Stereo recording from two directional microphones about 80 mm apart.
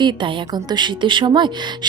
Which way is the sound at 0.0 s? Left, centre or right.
Right.